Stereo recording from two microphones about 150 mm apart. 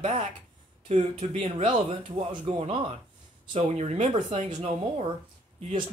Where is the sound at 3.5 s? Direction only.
45° right (ahead or behind).